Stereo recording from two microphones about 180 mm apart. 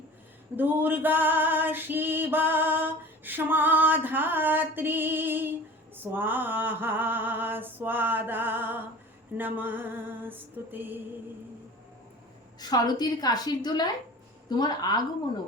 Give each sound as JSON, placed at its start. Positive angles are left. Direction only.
{"t": 0.5, "sound": "female singing", "side_deg": -10}
{"t": 12.5, "sound": "a woman's voice", "side_deg": 20}